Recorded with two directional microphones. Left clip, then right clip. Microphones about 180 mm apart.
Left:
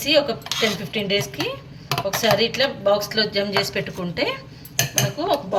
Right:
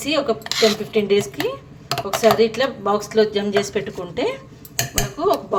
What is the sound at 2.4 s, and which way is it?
Speech, 45° right (ahead or behind).